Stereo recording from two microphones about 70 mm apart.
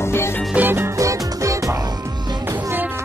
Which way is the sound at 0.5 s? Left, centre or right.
Right.